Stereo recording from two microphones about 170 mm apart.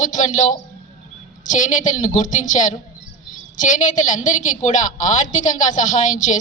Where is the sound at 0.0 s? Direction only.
45° left (ahead or behind).